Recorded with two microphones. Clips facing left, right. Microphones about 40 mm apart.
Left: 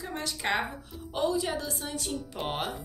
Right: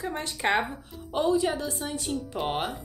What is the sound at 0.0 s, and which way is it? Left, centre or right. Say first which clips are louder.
A woman's voice: right 4 dB; right.